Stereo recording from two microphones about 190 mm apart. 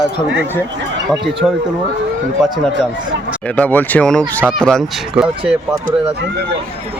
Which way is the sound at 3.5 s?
10° left (ahead or behind).